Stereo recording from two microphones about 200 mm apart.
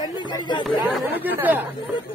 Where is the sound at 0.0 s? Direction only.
20° left (ahead or behind).